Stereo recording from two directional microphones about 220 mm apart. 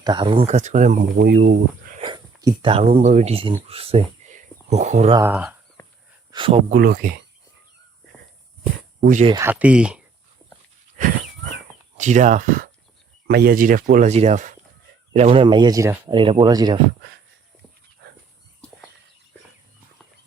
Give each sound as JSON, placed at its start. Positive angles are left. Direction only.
{"t": 0.0, "sound": "speech", "side_deg": -20}
{"t": 1.1, "sound": "speech", "side_deg": -45}
{"t": 1.5, "sound": "cricket", "side_deg": -40}
{"t": 2.0, "sound": "speech", "side_deg": -20}
{"t": 5.3, "sound": "speech", "side_deg": -5}
{"t": 6.3, "sound": "speech", "side_deg": -25}
{"t": 6.7, "sound": "speech", "side_deg": -40}
{"t": 9.0, "sound": "speech", "side_deg": -35}
{"t": 9.3, "sound": "speech", "side_deg": -10}
{"t": 11.9, "sound": "speech", "side_deg": -35}
{"t": 18.0, "sound": "dog", "side_deg": -50}